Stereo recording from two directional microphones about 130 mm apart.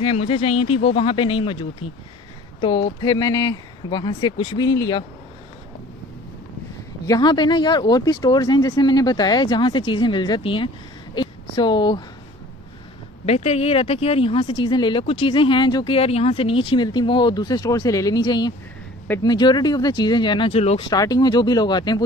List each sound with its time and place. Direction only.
0.0 s speech: 45° left (ahead or behind)
7.1 s speech: 35° left (ahead or behind)
13.2 s speech: 55° left (ahead or behind); by 16.0 s 35° left (ahead or behind)
16.0 s speech: 50° left (ahead or behind)
20.9 s speech: 30° left (ahead or behind)